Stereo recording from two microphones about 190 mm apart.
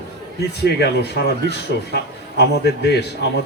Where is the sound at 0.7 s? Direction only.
60° left (ahead or behind).